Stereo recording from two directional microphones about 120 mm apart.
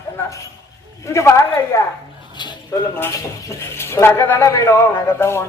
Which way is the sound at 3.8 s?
20° left (ahead or behind).